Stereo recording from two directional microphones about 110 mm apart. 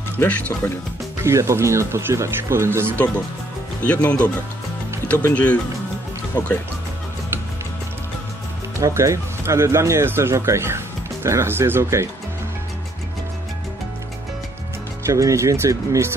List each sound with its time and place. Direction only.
0.2 s speech: 20° left (ahead or behind)
1.2 s speech: 25° right (ahead or behind)
3.8 s speech: 10° left (ahead or behind)
5.3 s speech: 15° left (ahead or behind)
8.7 s speech: 30° right (ahead or behind)
15.0 s speech: 30° right (ahead or behind)